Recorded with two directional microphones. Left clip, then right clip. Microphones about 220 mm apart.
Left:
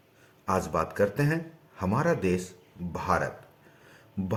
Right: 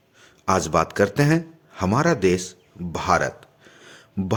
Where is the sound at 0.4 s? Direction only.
40° right (ahead or behind).